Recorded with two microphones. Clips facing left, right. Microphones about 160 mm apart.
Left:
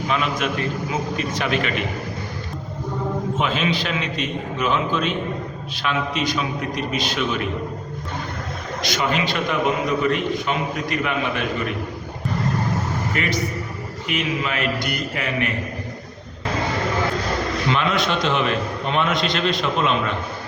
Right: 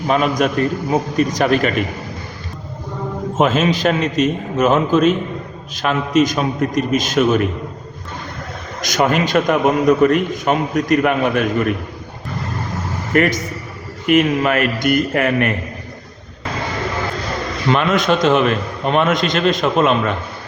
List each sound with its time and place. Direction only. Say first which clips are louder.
0.1 s a man's voice: right 8 dB; 45° right (ahead or behind)
3.3 s a man's voice: right 10 dB; 45° right (ahead or behind)
8.8 s a man's voice: right 6 dB; 45° right (ahead or behind)
13.1 s a man's voice: right 11 dB; 55° right (ahead or behind)
17.7 s a man's voice: right 7 dB; 50° right (ahead or behind)